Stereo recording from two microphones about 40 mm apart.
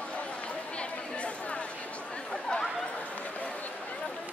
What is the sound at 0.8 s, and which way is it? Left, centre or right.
Chatter, left.